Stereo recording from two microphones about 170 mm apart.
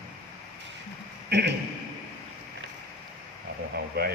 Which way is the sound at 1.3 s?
80° right.